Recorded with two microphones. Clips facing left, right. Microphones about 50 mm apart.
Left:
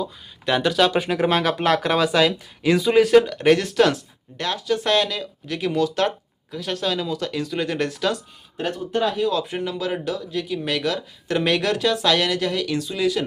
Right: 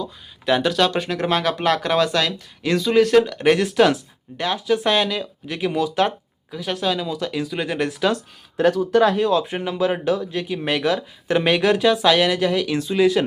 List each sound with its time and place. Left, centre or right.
0.4 s speech: centre
8.5 s speech: right
9.3 s speech: right
12.7 s speech: right